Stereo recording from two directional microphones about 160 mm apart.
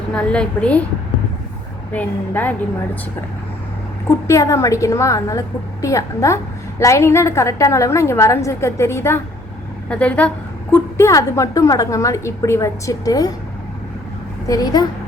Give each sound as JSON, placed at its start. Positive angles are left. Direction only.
{"t": 0.1, "sound": "a woman's voice", "side_deg": 5}
{"t": 1.9, "sound": "a woman's voice", "side_deg": 10}
{"t": 4.3, "sound": "a woman's voice", "side_deg": 20}
{"t": 14.4, "sound": "a woman's voice", "side_deg": 25}